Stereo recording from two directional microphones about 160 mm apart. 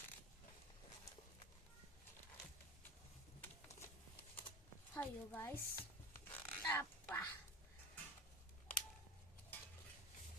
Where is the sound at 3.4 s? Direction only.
15° left (ahead or behind).